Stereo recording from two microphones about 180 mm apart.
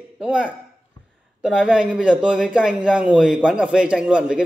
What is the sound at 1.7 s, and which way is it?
A man's voice, 5° right (ahead or behind).